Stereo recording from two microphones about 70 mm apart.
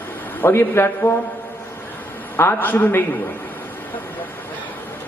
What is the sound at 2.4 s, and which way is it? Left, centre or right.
Speech, left.